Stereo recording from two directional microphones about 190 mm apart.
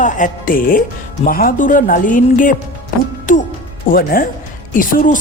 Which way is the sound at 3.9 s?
50° left (ahead or behind).